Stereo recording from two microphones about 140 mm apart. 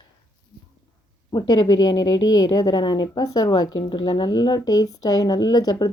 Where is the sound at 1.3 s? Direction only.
30° left (ahead or behind).